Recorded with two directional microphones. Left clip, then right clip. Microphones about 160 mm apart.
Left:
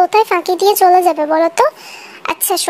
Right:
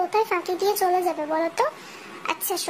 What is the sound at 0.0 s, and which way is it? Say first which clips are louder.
A woman's voice: left 11 dB; 40° left (ahead or behind).